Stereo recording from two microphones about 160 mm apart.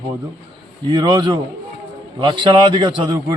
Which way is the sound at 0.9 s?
25° right (ahead or behind).